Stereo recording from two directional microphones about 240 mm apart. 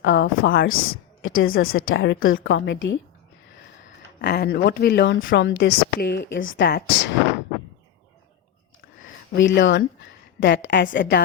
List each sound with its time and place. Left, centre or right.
0.0 s speech: left
9.0 s speech: left